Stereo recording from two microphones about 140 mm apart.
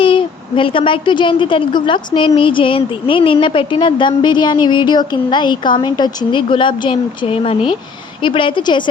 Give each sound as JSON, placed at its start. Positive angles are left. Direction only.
{"t": 0.0, "sound": "a woman's voice", "side_deg": 40}